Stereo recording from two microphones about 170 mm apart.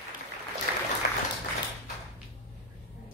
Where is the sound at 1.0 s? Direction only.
70° left (ahead or behind).